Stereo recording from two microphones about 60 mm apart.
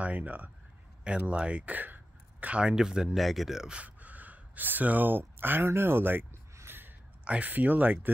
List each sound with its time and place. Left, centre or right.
0.0 s speech: right
3.2 s speech: centre
3.7 s speech: right
6.7 s a sound: right
7.2 s speech: right